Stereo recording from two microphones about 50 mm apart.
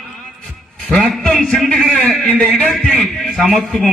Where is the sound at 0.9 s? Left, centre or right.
Centre.